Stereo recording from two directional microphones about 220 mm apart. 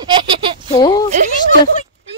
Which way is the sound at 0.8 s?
20° left (ahead or behind).